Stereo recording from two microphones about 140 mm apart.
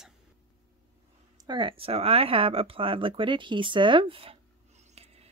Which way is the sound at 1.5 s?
35° right (ahead or behind).